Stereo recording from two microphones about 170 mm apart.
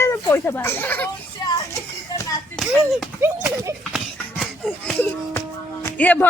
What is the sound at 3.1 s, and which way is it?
Speech, 15° right (ahead or behind).